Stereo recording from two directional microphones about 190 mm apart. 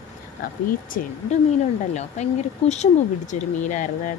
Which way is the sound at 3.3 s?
40° left (ahead or behind).